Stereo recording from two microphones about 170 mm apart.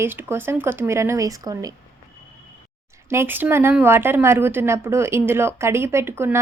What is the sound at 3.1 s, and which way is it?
Speech, 15° right (ahead or behind).